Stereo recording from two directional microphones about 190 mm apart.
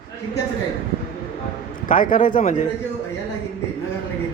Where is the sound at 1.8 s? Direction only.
45° left (ahead or behind).